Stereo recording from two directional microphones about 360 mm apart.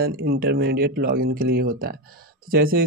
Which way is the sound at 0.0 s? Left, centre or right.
Right.